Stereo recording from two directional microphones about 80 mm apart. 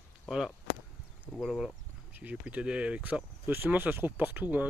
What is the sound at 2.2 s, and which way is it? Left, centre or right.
Speech, centre.